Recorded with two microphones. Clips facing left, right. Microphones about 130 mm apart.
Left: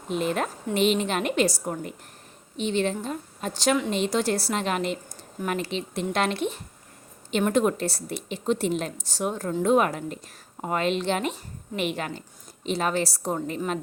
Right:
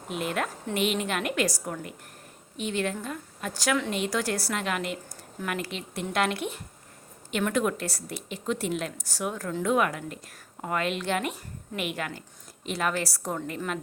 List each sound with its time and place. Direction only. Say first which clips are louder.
0.2 s a woman's voice: left 2 dB; 25° left (ahead or behind)